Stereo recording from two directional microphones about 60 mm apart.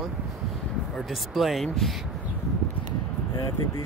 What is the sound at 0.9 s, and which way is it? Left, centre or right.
Speech, centre.